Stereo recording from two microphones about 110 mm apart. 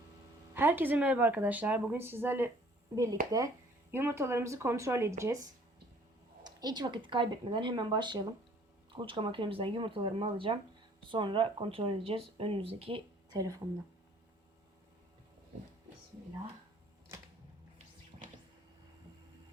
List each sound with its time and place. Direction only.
0.5 s speech: 20° right (ahead or behind)
2.9 s speech: 30° right (ahead or behind); by 13.0 s 60° right (ahead or behind)
13.3 s speech: 30° right (ahead or behind)
17.1 s a sound: 25° right (ahead or behind)
18.1 s cupboard open or close: 60° right (ahead or behind)